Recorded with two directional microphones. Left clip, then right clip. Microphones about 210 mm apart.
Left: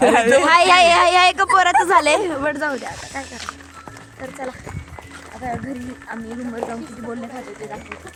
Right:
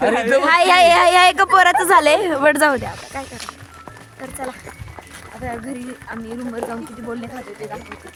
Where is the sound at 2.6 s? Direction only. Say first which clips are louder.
Right 7 dB; 45° right (ahead or behind).